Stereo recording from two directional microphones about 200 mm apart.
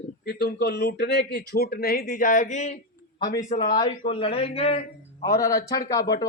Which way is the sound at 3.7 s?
25° left (ahead or behind).